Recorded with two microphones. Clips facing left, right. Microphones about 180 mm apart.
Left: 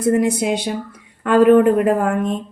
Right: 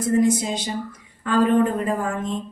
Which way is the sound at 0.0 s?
60° left (ahead or behind).